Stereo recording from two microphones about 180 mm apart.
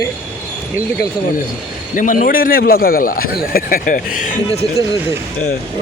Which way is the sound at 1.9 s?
45° left (ahead or behind).